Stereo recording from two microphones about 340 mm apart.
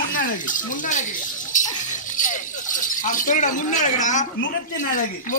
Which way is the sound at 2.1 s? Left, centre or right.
Left.